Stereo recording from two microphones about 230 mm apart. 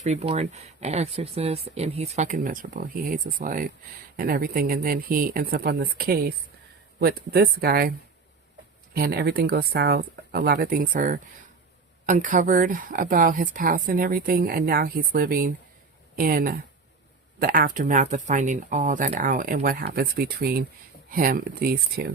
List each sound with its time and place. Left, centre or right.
0.0 s speech: right